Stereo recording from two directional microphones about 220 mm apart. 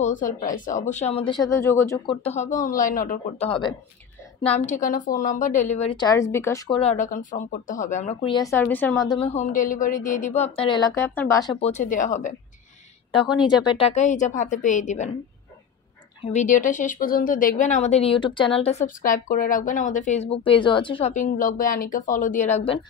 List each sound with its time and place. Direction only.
0.0 s a woman's voice: 35° left (ahead or behind); by 2.0 s 10° left (ahead or behind)
2.0 s a woman's voice: 30° left (ahead or behind); by 6.8 s 15° left (ahead or behind)
6.8 s speech: 30° left (ahead or behind); by 9.1 s 10° left (ahead or behind)
9.2 s speech: 30° left (ahead or behind); by 11.5 s 15° left (ahead or behind)
11.6 s a woman's voice: 35° left (ahead or behind)
13.7 s a woman's voice: 30° left (ahead or behind)
16.3 s a woman's voice: 35° left (ahead or behind)